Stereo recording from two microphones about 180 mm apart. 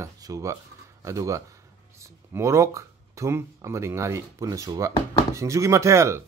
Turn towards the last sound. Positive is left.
turn(degrees=-15)  # may be behind; listen again after turning